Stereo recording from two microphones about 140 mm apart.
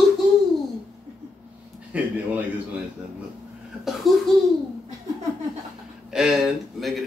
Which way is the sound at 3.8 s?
Centre (ahead or behind).